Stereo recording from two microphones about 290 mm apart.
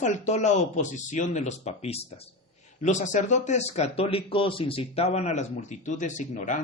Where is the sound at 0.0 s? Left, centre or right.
Left.